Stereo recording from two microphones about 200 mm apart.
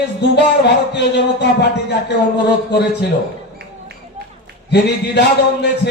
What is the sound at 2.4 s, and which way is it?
Speech, 55° left (ahead or behind).